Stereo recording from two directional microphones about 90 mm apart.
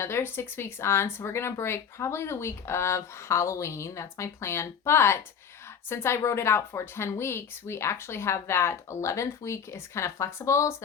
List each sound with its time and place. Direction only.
0.0 s speech: 25° left (ahead or behind)